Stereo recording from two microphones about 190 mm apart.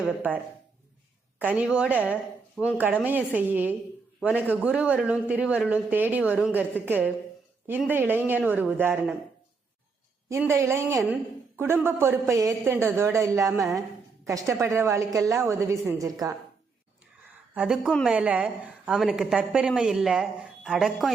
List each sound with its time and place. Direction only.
0.0 s a woman's voice: 10° right (ahead or behind)
1.4 s a woman's voice: 5° right (ahead or behind)
10.2 s a woman's voice: 15° right (ahead or behind)
17.5 s a woman's voice: 5° right (ahead or behind)